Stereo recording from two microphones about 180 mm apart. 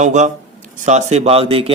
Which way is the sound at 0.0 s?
40° right (ahead or behind).